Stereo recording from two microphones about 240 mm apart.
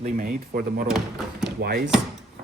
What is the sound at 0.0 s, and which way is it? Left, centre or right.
Speech, right.